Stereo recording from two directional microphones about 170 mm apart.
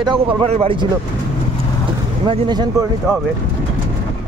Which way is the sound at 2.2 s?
30° right (ahead or behind).